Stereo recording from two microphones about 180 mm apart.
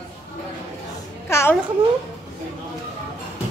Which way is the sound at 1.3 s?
15° left (ahead or behind).